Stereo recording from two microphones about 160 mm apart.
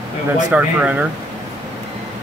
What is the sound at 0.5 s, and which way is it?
Speech, 10° right (ahead or behind).